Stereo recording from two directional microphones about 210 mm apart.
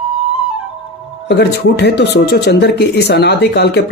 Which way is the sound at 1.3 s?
55° left (ahead or behind).